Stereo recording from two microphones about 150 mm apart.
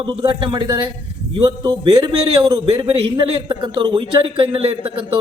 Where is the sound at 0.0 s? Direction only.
30° right (ahead or behind).